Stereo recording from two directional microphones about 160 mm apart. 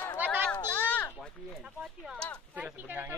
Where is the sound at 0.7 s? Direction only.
10° left (ahead or behind).